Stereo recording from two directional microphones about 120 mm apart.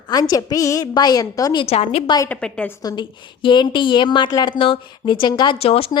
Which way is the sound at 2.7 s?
30° left (ahead or behind).